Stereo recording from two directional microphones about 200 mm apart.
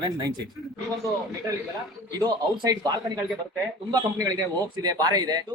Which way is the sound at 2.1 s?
20° right (ahead or behind).